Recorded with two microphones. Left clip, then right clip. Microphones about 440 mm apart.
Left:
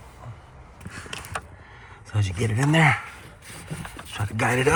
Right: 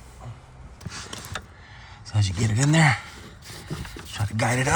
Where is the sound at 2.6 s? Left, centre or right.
Centre.